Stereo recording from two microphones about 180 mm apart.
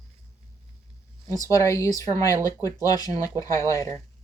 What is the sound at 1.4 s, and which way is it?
Speech, 15° left (ahead or behind).